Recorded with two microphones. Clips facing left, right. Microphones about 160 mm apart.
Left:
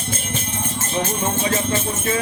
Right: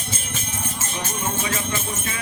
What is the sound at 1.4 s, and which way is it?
Music, 35° left (ahead or behind).